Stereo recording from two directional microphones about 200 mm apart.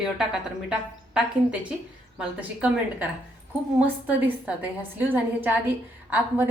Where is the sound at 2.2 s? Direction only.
5° right (ahead or behind).